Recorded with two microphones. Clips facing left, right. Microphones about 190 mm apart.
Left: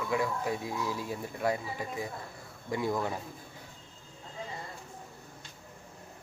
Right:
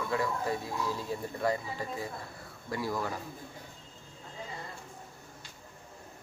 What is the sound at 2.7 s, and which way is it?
Speech, 20° left (ahead or behind).